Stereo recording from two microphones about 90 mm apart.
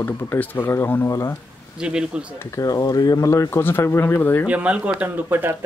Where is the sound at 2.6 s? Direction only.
45° left (ahead or behind); by 4.4 s 25° left (ahead or behind).